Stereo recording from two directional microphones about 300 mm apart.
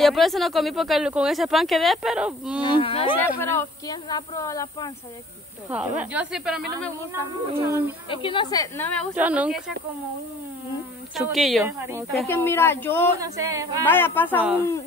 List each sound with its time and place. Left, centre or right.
0.0 s speech: centre
2.6 s speech: centre
5.7 s speech: centre
7.5 s a sound: centre
8.1 s speech: centre
9.1 s speech: centre
11.1 s speech: centre
12.1 s speech: centre
13.2 s a sound: centre
13.8 s speech: centre